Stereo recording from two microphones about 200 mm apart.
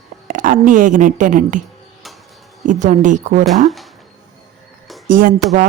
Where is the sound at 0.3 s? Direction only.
40° right (ahead or behind).